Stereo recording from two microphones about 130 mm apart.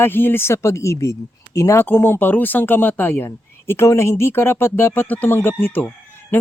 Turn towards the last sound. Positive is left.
turn(degrees=15)  # may be behind; listen again after turning